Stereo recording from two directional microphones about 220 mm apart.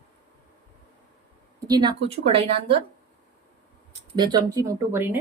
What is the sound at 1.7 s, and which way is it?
Speech, 20° right (ahead or behind).